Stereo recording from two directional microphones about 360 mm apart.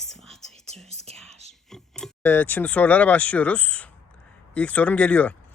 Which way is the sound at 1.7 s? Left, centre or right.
Centre.